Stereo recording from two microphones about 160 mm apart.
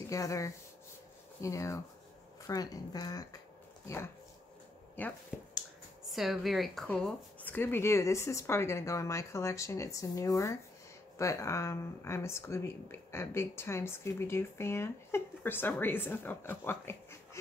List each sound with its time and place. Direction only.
0.1 s speech: 20° left (ahead or behind)
5.0 s speech: 10° left (ahead or behind)
6.0 s speech: centre (ahead or behind); by 17.4 s 15° left (ahead or behind)